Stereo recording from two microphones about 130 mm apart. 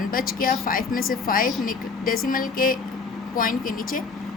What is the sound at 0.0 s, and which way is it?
A woman's voice, 90° left.